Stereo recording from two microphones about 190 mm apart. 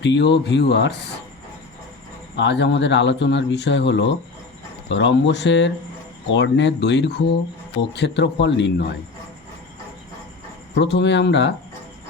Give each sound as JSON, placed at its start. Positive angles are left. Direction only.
{"t": 0.0, "sound": "speech", "side_deg": 65}
{"t": 2.3, "sound": "speech", "side_deg": 65}
{"t": 10.8, "sound": "speech", "side_deg": 65}